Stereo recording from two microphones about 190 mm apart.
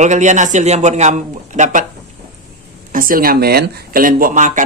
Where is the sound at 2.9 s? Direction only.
45° right (ahead or behind).